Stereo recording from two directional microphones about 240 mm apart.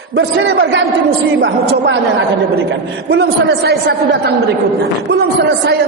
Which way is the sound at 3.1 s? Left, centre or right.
Right.